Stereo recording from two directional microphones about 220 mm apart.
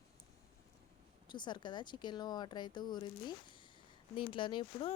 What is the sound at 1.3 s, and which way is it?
Speech, 20° left (ahead or behind).